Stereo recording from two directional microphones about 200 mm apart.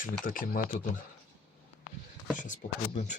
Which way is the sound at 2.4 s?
35° left (ahead or behind).